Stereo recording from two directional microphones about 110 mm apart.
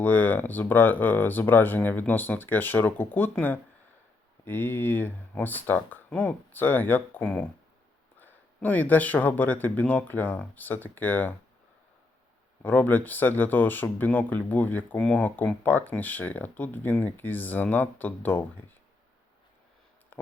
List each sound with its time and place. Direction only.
0.0 s speech: 15° left (ahead or behind)
4.4 s speech: 20° left (ahead or behind)
12.6 s speech: 15° left (ahead or behind)